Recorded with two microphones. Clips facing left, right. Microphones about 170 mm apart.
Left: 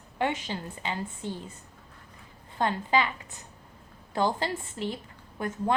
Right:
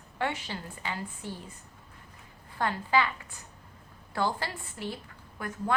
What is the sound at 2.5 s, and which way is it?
Speech, 20° left (ahead or behind).